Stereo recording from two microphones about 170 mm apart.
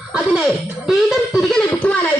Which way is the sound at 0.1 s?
5° right (ahead or behind).